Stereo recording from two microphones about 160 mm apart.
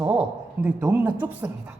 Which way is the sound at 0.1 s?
5° right (ahead or behind).